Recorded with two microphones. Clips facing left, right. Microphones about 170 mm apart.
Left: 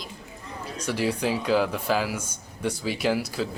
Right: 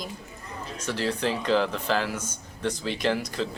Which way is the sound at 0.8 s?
10° left (ahead or behind).